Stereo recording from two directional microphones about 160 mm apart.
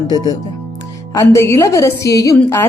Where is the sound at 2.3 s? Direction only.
15° left (ahead or behind).